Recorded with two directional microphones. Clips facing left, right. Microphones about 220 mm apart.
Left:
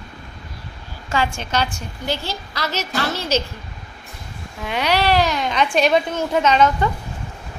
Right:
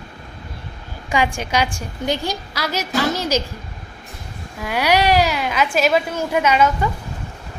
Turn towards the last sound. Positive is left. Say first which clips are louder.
# left 1 dB
turn(degrees=-10)  # may be behind; listen again after turning